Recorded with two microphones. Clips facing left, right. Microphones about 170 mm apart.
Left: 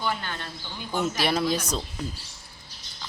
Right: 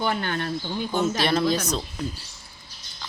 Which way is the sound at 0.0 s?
55° right (ahead or behind).